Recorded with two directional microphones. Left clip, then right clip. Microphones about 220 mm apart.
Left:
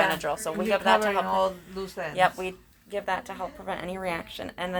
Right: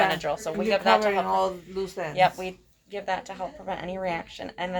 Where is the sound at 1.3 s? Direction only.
30° right (ahead or behind).